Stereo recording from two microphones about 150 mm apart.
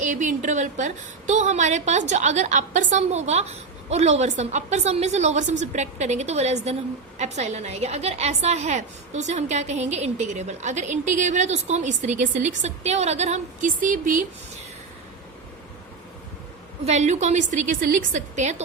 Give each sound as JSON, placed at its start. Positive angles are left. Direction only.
{"t": 0.0, "sound": "a woman's voice", "side_deg": -55}
{"t": 16.8, "sound": "a woman's voice", "side_deg": -50}